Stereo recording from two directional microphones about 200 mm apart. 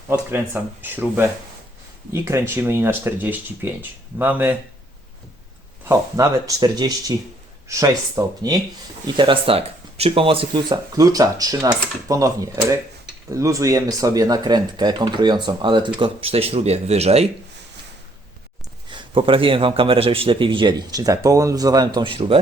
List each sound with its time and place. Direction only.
0.1 s speech: 10° right (ahead or behind)
5.9 s speech: 15° right (ahead or behind); by 17.2 s 30° right (ahead or behind)
18.9 s speech: 25° right (ahead or behind)